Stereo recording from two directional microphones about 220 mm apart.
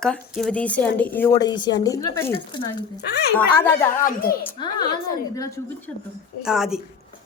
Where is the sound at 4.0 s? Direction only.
40° left (ahead or behind).